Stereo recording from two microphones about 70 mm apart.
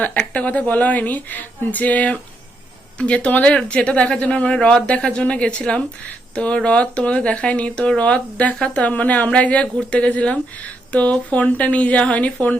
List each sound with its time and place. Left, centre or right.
0.0 s a woman's voice: left